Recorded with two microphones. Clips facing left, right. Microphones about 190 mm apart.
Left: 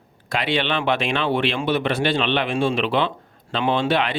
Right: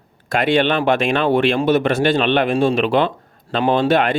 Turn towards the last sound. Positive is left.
turn(degrees=-45)  # may be behind; listen again after turning